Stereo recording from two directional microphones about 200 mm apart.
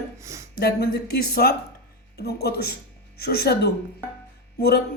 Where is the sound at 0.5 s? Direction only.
50° left (ahead or behind).